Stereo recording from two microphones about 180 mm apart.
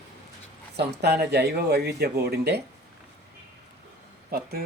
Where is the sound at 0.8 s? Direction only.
65° right (ahead or behind).